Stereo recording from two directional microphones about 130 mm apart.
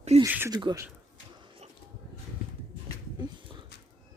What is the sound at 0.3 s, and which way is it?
Speech, 15° right (ahead or behind).